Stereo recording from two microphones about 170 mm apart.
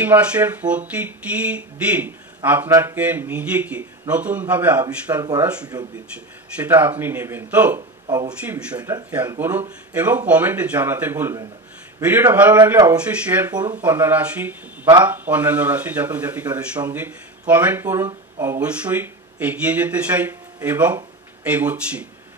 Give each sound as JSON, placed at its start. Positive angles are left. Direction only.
{"t": 0.0, "sound": "speech", "side_deg": -10}
{"t": 5.1, "sound": "speech", "side_deg": -25}
{"t": 5.4, "sound": "speech", "side_deg": -5}
{"t": 8.7, "sound": "speech", "side_deg": -20}
{"t": 9.1, "sound": "speech", "side_deg": -10}